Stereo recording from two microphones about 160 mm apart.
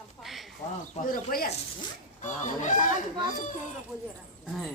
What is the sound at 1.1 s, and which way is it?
Speech, 65° left (ahead or behind).